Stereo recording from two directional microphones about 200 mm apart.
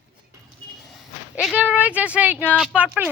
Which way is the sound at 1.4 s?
5° right (ahead or behind).